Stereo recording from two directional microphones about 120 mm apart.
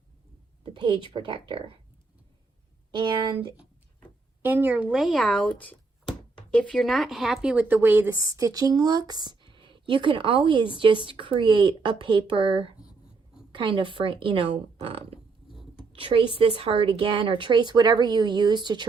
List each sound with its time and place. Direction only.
0.6 s a sound: 40° right (ahead or behind)
1.1 s speech: 40° right (ahead or behind)
2.9 s speech: 40° right (ahead or behind)
4.4 s speech: 15° right (ahead or behind)
5.2 s a woman's voice: 10° left (ahead or behind); by 18.9 s 40° right (ahead or behind)